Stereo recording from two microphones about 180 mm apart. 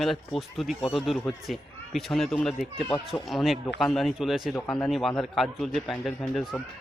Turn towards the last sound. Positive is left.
turn(degrees=0)  # may be behind; listen again after turning